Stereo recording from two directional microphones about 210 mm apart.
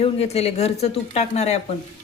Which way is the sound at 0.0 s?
30° left (ahead or behind).